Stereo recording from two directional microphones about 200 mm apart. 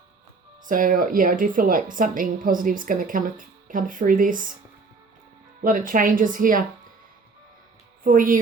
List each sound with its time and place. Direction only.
0.6 s a woman's voice: 40° right (ahead or behind)
5.6 s a woman's voice: 40° right (ahead or behind)
8.0 s a woman's voice: 45° right (ahead or behind)